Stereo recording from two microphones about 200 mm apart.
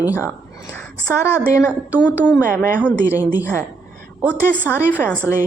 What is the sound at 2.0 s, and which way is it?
A woman's voice, 5° left (ahead or behind).